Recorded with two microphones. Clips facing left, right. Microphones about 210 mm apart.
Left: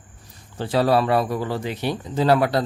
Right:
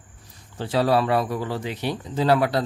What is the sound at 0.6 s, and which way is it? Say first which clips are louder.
Speech: left 2 dB; 50° left (ahead or behind).